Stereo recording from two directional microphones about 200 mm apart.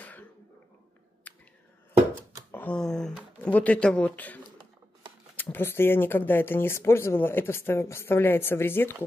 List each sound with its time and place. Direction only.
2.5 s speech: 5° left (ahead or behind)